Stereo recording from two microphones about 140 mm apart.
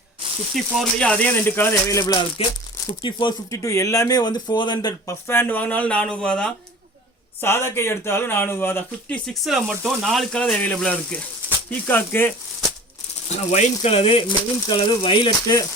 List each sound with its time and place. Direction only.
0.5 s speech: 5° left (ahead or behind); by 3.3 s 35° left (ahead or behind)
3.5 s speech: 20° left (ahead or behind)
5.3 s speech: 15° left (ahead or behind)
7.4 s speech: 15° left (ahead or behind)
13.2 s speech: 50° left (ahead or behind); by 15.3 s 35° left (ahead or behind)
15.4 s speech: 25° left (ahead or behind)